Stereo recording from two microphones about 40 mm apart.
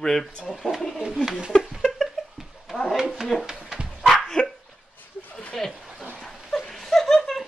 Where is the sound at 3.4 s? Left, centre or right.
Centre.